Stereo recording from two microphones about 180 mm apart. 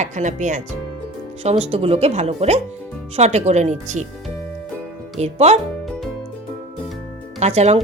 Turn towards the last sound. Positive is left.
turn(degrees=-35)  # may be behind; listen again after turning